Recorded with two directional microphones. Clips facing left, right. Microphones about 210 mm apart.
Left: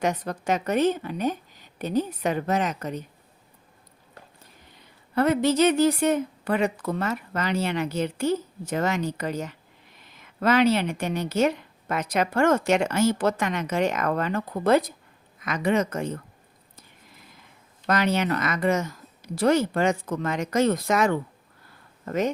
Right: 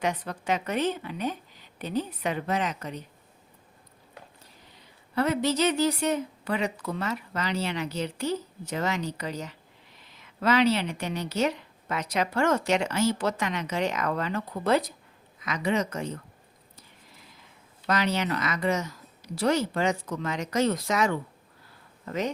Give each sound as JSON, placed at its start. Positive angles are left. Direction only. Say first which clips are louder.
{"t": 0.0, "sound": "a woman's voice", "louder": "left 4 dB", "side_deg": 45}
{"t": 5.1, "sound": "a woman's voice", "louder": "left 4 dB", "side_deg": 55}
{"t": 17.8, "sound": "a woman's voice", "louder": "left 3 dB", "side_deg": 50}